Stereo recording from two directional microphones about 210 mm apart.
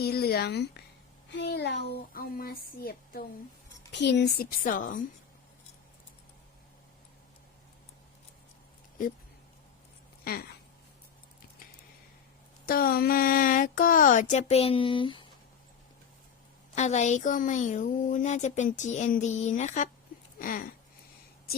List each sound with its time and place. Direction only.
0.0 s speech: 50° left (ahead or behind)
3.9 s speech: 55° left (ahead or behind); by 5.0 s 40° left (ahead or behind)
12.6 s a woman's voice: 45° left (ahead or behind); by 15.3 s 25° left (ahead or behind)
16.7 s a woman's voice: 35° left (ahead or behind)